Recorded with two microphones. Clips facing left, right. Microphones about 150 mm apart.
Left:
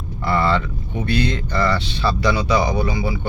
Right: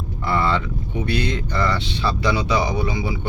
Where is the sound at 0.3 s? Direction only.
15° right (ahead or behind).